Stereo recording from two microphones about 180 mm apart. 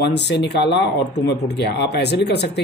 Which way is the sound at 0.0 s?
70° left (ahead or behind).